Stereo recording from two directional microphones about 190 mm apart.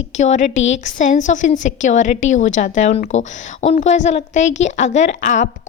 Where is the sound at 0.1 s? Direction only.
40° left (ahead or behind).